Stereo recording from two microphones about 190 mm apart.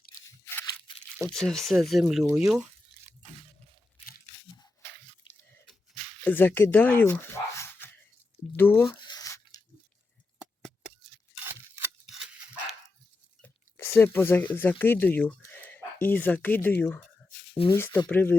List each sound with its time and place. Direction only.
0.4 s a sound: 15° left (ahead or behind)
1.3 s speech: 5° left (ahead or behind)
4.5 s squish: 15° left (ahead or behind)
6.2 s speech: 10° left (ahead or behind)
8.9 s rub: 25° left (ahead or behind)
12.1 s dog: 5° right (ahead or behind)
13.4 s chewing: 15° left (ahead or behind)
14.5 s speech: 10° left (ahead or behind)